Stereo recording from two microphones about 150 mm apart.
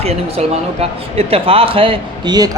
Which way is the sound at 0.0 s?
45° right (ahead or behind).